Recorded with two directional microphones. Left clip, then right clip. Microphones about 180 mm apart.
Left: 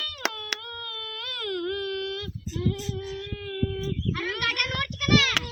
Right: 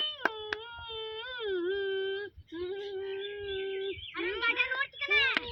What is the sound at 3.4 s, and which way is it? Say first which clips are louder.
Bird: left 4 dB; 10° left (ahead or behind).